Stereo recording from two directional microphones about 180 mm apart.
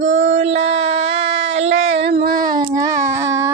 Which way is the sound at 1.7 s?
90° right.